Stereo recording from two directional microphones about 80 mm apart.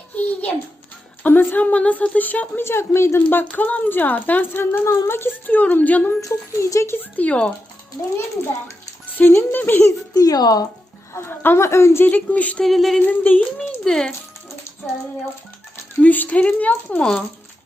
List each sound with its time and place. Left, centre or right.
0.2 s a sound: centre
1.2 s speech: left
2.6 s a woman's voice: left
3.2 s speech: left
6.1 s a woman's voice: left
7.0 s a child's voice: centre
9.1 s speech: left
10.2 s speech: left
11.1 s a woman's voice: left
12.0 s speech: centre
12.6 s a sound: centre
13.1 s speech: left
13.4 s a child's voice: centre
16.0 s speech: left